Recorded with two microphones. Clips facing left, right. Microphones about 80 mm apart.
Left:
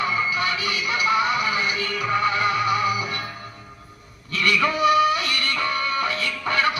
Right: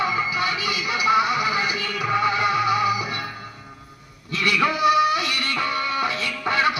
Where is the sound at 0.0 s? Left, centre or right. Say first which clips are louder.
Even; centre.